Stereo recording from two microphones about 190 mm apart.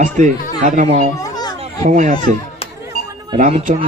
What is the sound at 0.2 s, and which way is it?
Speech, 40° right (ahead or behind).